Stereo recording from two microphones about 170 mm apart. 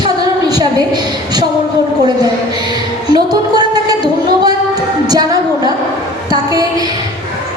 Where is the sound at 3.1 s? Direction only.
25° right (ahead or behind).